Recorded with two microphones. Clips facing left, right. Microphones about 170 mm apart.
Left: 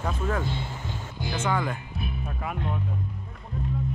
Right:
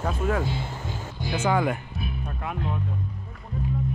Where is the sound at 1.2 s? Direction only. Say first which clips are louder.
Right 3 dB; centre (ahead or behind).